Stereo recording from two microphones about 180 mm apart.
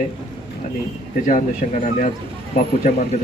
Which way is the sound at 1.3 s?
45° left (ahead or behind).